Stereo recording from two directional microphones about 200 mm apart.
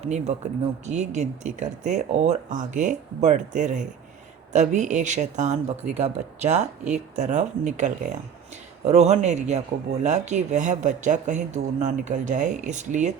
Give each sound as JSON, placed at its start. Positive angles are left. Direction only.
{"t": 0.0, "sound": "speech", "side_deg": -35}